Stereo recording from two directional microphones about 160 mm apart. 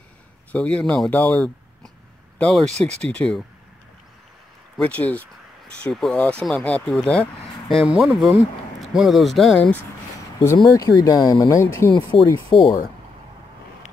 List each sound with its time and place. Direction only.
0.5 s speech: 5° left (ahead or behind)
4.7 s speech: 10° left (ahead or behind)
10.4 s speech: 20° left (ahead or behind)
12.4 s speech: 25° left (ahead or behind)